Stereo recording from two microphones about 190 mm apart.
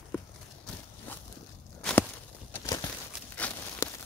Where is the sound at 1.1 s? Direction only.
10° left (ahead or behind).